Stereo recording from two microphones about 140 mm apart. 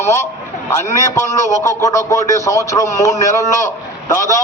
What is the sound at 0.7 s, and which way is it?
A man's voice, 15° left (ahead or behind).